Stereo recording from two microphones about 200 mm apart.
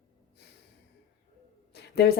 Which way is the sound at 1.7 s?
55° left (ahead or behind).